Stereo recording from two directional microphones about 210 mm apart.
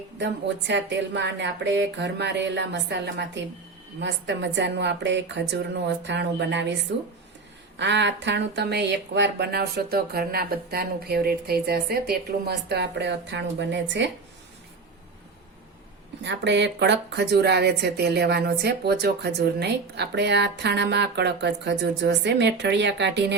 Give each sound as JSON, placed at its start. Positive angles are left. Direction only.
{"t": 0.2, "sound": "speech", "side_deg": -55}
{"t": 7.8, "sound": "speech", "side_deg": -55}
{"t": 16.2, "sound": "speech", "side_deg": -55}